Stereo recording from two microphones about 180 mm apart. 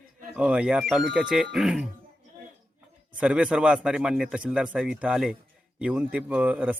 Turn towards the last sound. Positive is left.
turn(degrees=-10)  # may be behind; listen again after turning